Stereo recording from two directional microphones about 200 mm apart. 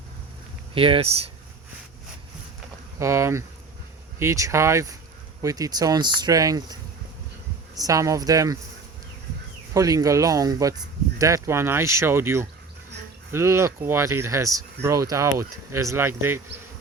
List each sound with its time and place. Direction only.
0.7 s speech: 25° right (ahead or behind)
3.0 s speech: 15° right (ahead or behind)
7.8 s speech: 15° right (ahead or behind)
9.7 s speech: 15° right (ahead or behind)